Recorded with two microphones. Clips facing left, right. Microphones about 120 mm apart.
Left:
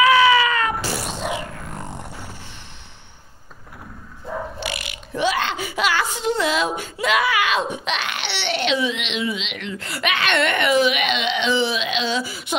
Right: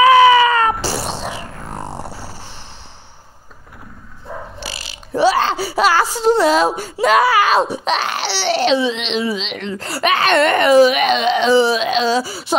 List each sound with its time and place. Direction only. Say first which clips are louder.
0.0 s cat: right 6 dB; 35° right (ahead or behind)
4.6 s speech: left 2 dB; 30° right (ahead or behind)